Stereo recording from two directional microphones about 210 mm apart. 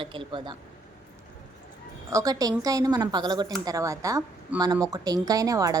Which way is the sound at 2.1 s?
15° right (ahead or behind).